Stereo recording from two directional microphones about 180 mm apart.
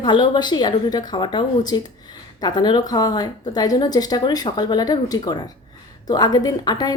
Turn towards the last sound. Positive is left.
turn(degrees=20)  # may be behind; listen again after turning